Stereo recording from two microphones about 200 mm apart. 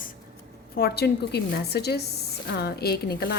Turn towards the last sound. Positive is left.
turn(degrees=50)  # may be behind; listen again after turning